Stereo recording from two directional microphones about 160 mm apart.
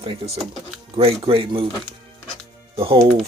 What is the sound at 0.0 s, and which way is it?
Speech, 30° right (ahead or behind).